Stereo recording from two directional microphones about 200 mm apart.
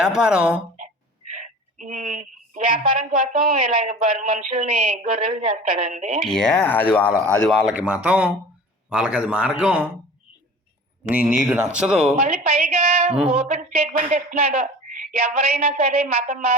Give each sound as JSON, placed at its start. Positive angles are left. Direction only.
{"t": 0.2, "sound": "speech", "side_deg": -5}
{"t": 1.3, "sound": "a sound", "side_deg": -40}
{"t": 2.6, "sound": "speech", "side_deg": -45}
{"t": 5.6, "sound": "speech", "side_deg": -45}
{"t": 6.2, "sound": "speech", "side_deg": 0}
{"t": 11.1, "sound": "speech", "side_deg": -5}
{"t": 12.2, "sound": "speech", "side_deg": -35}
{"t": 13.1, "sound": "speech", "side_deg": -5}
{"t": 13.5, "sound": "speech", "side_deg": -40}